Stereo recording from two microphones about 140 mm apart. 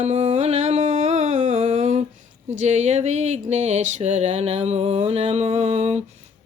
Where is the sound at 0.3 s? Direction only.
55° right (ahead or behind).